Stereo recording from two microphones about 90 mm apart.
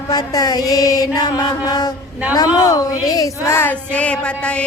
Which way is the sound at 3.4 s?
25° left (ahead or behind).